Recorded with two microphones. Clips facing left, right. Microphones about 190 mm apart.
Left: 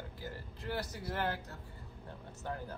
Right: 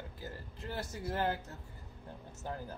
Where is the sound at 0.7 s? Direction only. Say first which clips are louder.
Even; 25° right (ahead or behind).